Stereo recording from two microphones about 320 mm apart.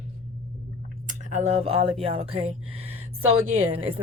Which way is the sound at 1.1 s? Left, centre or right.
Right.